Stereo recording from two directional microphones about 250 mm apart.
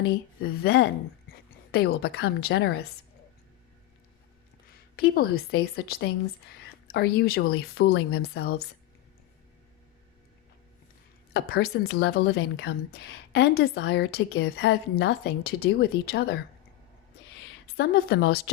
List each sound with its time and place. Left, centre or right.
0.3 s a woman's voice: left
4.9 s speech: left
11.3 s speech: left
17.7 s speech: left